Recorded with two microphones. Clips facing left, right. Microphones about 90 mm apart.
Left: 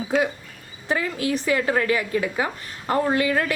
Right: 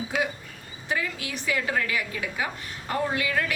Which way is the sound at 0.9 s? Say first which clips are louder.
Left 7 dB; 40° left (ahead or behind).